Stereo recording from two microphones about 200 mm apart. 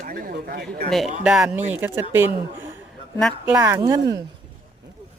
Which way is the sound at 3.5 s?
15° right (ahead or behind).